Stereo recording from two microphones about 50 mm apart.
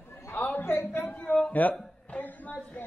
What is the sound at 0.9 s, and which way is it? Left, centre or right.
Speech, left.